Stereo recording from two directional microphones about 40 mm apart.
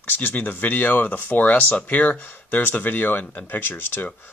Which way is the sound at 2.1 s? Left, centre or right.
Left.